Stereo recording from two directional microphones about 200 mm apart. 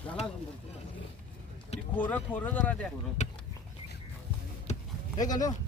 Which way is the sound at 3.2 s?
35° left (ahead or behind).